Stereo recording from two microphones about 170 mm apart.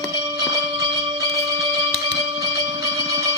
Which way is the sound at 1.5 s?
20° right (ahead or behind).